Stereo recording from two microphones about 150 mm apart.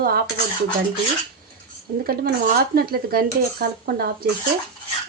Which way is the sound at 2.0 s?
85° right.